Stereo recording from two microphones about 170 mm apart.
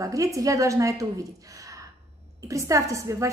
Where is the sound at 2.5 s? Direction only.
20° right (ahead or behind).